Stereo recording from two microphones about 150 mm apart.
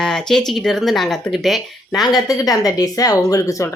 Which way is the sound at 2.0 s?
25° left (ahead or behind).